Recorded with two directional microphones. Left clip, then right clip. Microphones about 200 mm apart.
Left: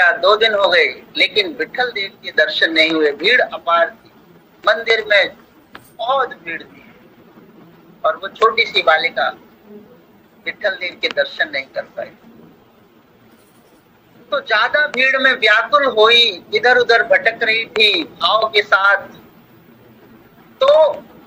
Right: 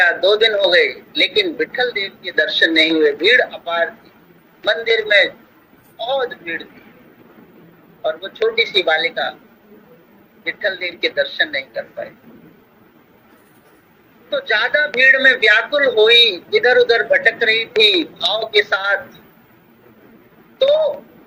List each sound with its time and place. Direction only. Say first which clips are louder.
0.0 s a man's voice: left 1 dB; 10° right (ahead or behind)
6.3 s a man's voice: right 1 dB; 10° right (ahead or behind)
8.0 s a man's voice: left 4 dB; 10° right (ahead or behind)
10.4 s speech: even; 5° right (ahead or behind)
14.3 s speech: left 1 dB; 5° right (ahead or behind)
16.9 s speech: left 2 dB; 45° left (ahead or behind)
17.2 s a man's voice: right 1 dB; 10° right (ahead or behind)
20.7 s speech: left 4 dB; 45° left (ahead or behind)